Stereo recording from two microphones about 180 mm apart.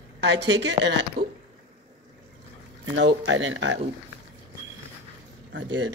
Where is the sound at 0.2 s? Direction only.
75° right (ahead or behind).